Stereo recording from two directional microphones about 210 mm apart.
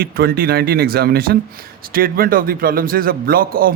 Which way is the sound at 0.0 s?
45° right (ahead or behind).